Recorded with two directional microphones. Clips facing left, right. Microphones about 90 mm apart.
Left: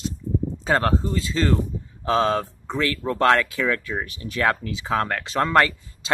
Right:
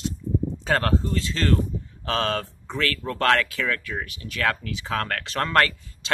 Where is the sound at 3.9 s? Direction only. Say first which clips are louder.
Left 3 dB; 30° left (ahead or behind).